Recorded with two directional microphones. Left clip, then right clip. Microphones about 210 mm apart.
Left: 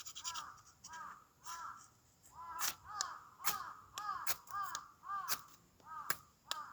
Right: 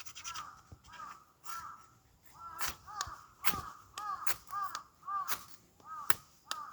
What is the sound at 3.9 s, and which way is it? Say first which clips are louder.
Crow: right 3 dB; 10° right (ahead or behind).